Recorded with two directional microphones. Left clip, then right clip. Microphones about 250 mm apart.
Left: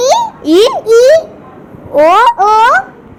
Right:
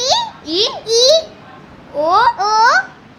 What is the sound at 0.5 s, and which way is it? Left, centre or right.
Speech, left.